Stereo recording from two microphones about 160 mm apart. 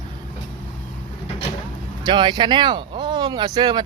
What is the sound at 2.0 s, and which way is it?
Speech, 30° right (ahead or behind).